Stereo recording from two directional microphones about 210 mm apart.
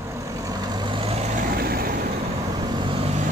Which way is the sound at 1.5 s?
45° right (ahead or behind).